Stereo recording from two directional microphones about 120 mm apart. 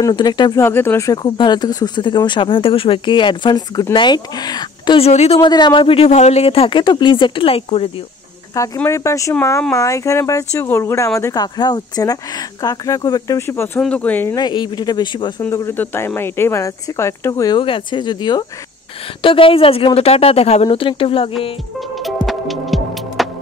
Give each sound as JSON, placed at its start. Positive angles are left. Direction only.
{"t": 0.0, "sound": "speech", "side_deg": 35}
{"t": 0.6, "sound": "speech", "side_deg": 20}
{"t": 1.2, "sound": "speech", "side_deg": 40}
{"t": 4.9, "sound": "speech", "side_deg": 60}
{"t": 5.4, "sound": "a man's voice", "side_deg": 40}
{"t": 6.8, "sound": "a man's voice", "side_deg": 35}
{"t": 8.8, "sound": "speech", "side_deg": 25}
{"t": 14.3, "sound": "speech", "side_deg": 35}
{"t": 15.5, "sound": "speech", "side_deg": 20}
{"t": 17.6, "sound": "speech", "side_deg": 45}
{"t": 19.2, "sound": "a man's voice", "side_deg": 50}
{"t": 20.6, "sound": "a man's voice", "side_deg": 45}
{"t": 21.7, "sound": "music", "side_deg": 0}